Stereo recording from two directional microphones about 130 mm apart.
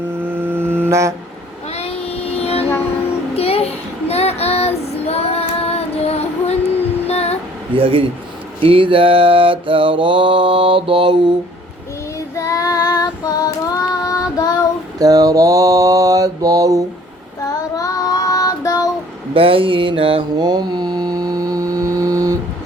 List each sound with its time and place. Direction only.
0.2 s music: 15° right (ahead or behind)
1.7 s child singing: 50° left (ahead or behind)
7.1 s music: 55° left (ahead or behind)
7.7 s a sound: 45° right (ahead or behind)
8.6 s mantra: 45° right (ahead or behind)
12.4 s child singing: 25° left (ahead or behind)
14.9 s mantra: 30° right (ahead or behind)
17.7 s child singing: 25° left (ahead or behind)
19.3 s mantra: 45° right (ahead or behind); by 22.4 s 25° right (ahead or behind)